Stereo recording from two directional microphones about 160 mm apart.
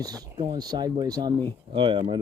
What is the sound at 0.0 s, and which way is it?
Speech, 25° right (ahead or behind).